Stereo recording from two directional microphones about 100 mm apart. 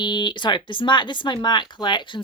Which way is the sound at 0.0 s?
50° left (ahead or behind).